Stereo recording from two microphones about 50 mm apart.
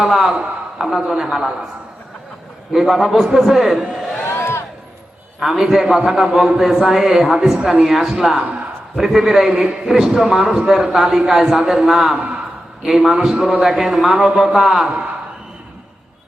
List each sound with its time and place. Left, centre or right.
0.0 s a man's voice: centre
0.8 s a man's voice: centre
2.7 s a man's voice: centre
4.3 s a sound: left
5.4 s a man's voice: centre
9.6 s a man's voice: right
9.9 s a man's voice: centre
12.1 s a man's voice: right
12.8 s a man's voice: centre